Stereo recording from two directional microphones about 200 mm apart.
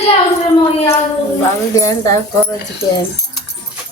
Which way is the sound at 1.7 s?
15° left (ahead or behind).